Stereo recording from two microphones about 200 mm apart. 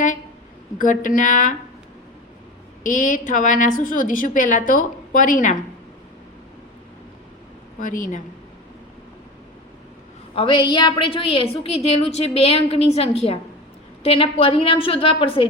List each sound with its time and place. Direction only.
0.8 s a woman's voice: 40° left (ahead or behind)
2.8 s a woman's voice: 40° left (ahead or behind)
7.8 s a woman's voice: 40° left (ahead or behind)
10.3 s a woman's voice: 25° left (ahead or behind)